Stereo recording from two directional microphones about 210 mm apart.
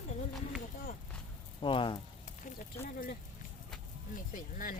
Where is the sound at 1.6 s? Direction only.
25° left (ahead or behind).